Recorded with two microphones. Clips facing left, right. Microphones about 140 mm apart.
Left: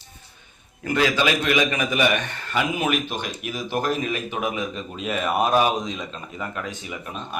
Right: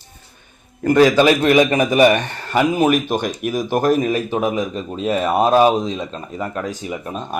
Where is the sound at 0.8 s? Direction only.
45° right (ahead or behind).